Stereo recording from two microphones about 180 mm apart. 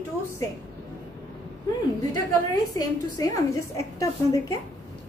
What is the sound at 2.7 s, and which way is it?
A woman's voice, 20° left (ahead or behind).